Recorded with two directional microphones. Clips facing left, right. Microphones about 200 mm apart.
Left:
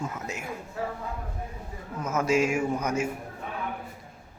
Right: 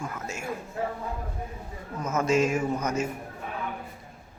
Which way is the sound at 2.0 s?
10° left (ahead or behind).